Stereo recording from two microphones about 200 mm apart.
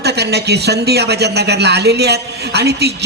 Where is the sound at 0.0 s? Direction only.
55° right (ahead or behind).